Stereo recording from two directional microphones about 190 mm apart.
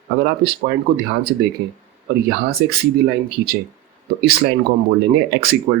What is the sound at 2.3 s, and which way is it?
Speech, 55° right (ahead or behind).